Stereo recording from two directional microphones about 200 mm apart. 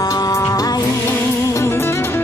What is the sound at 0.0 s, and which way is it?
Music, 15° left (ahead or behind).